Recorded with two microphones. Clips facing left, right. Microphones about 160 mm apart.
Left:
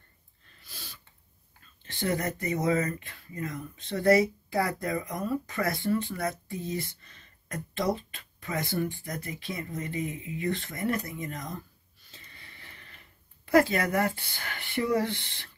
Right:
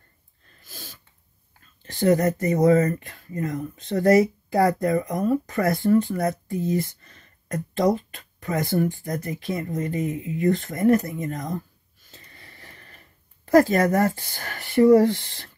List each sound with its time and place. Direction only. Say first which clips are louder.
0.6 s snort: right 5 dB; 45° right (ahead or behind)
1.9 s speech: right 10 dB; 40° right (ahead or behind)
4.8 s speech: right 9 dB; 40° right (ahead or behind)
12.1 s sniff: right 4 dB; 40° right (ahead or behind)
13.5 s speech: right 6 dB; 45° right (ahead or behind)